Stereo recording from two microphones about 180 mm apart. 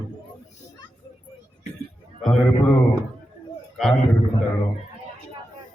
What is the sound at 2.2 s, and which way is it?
Speech, 5° left (ahead or behind).